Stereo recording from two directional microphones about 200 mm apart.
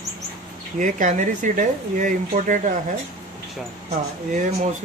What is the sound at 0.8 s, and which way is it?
Speech, 40° right (ahead or behind).